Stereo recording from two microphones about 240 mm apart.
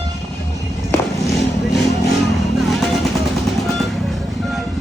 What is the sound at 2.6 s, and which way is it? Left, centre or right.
Vehicle, centre.